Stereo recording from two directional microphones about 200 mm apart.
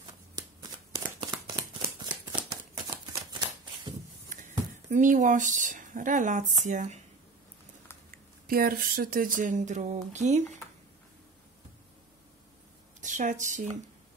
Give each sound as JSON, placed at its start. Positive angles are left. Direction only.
{"t": 0.4, "sound": "shuffling cards", "side_deg": -20}
{"t": 4.3, "sound": "speech", "side_deg": -40}
{"t": 8.5, "sound": "speech", "side_deg": -45}
{"t": 13.0, "sound": "speech", "side_deg": -40}